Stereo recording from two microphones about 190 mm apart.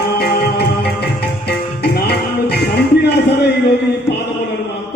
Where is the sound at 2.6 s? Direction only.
60° left (ahead or behind).